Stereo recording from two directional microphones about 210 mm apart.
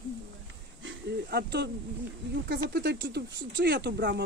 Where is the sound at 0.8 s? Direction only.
55° right (ahead or behind).